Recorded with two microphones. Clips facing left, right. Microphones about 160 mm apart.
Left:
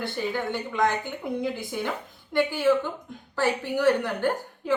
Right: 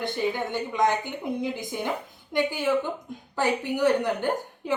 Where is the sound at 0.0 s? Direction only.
15° right (ahead or behind).